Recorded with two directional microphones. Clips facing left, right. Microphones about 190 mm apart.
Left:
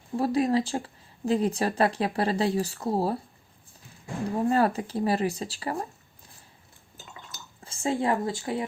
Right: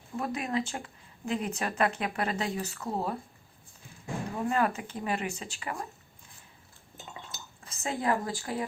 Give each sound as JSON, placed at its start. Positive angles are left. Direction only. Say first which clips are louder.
{"t": 0.2, "sound": "speech", "louder": "left 8 dB", "side_deg": 35}
{"t": 4.4, "sound": "speech", "louder": "left 5 dB", "side_deg": 35}
{"t": 7.6, "sound": "speech", "louder": "left 5 dB", "side_deg": 30}